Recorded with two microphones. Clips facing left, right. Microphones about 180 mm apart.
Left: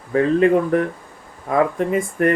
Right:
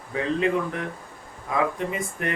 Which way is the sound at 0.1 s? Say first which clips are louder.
Left 9 dB; 50° left (ahead or behind).